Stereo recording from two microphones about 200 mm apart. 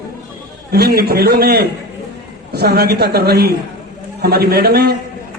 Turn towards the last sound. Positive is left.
turn(degrees=-55)  # may be behind; listen again after turning